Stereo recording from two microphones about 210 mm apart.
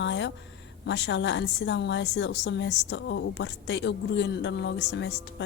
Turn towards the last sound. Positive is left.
turn(degrees=55)  # may be behind; listen again after turning